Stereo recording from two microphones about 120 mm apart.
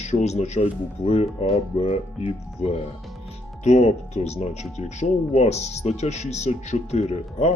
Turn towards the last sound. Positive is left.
turn(degrees=65)  # may be behind; listen again after turning